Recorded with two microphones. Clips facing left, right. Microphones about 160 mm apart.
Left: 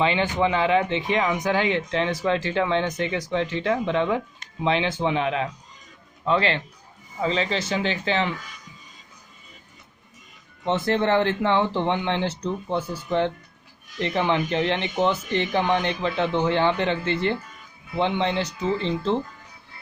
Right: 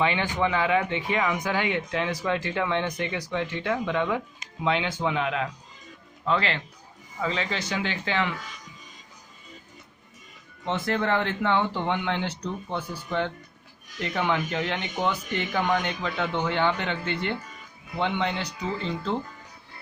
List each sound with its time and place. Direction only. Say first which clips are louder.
0.0 s speech: left 3 dB; 25° left (ahead or behind)
10.7 s speech: left 4 dB; 30° left (ahead or behind)
17.9 s speech: left 4 dB; 25° left (ahead or behind)